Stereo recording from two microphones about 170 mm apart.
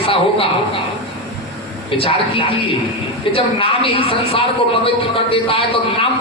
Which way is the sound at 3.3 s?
30° left (ahead or behind).